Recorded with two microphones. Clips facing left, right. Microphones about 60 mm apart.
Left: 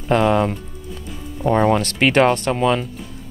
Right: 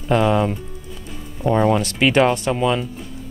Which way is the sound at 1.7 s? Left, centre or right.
Left.